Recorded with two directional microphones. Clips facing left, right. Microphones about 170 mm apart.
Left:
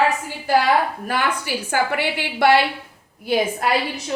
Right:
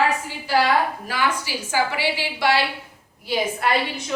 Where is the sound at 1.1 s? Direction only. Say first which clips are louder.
Left 2 dB; 55° left (ahead or behind).